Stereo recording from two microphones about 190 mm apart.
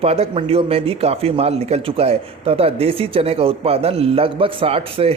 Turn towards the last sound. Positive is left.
turn(degrees=-30)  # may be behind; listen again after turning